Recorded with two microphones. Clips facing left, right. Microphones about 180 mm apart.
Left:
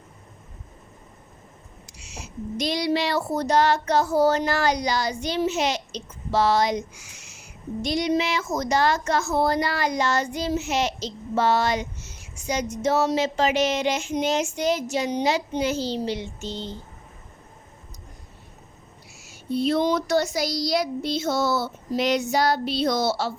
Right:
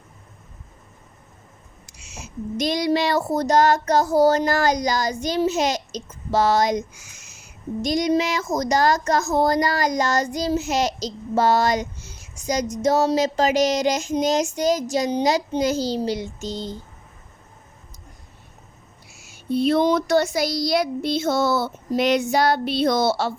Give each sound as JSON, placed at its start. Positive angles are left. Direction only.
{"t": 1.9, "sound": "speech", "side_deg": -45}
{"t": 19.2, "sound": "speech", "side_deg": -55}